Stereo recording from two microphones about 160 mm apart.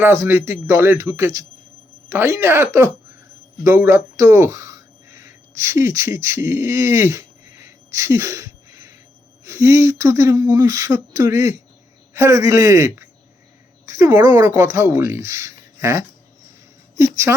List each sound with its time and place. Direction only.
0.0 s speech: 15° right (ahead or behind)